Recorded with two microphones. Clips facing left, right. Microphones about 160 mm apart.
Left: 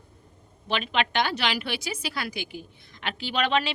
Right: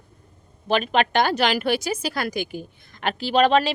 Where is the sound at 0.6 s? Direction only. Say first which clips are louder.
Right 6 dB; 45° right (ahead or behind).